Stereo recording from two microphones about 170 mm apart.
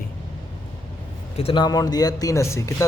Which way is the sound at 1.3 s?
30° left (ahead or behind).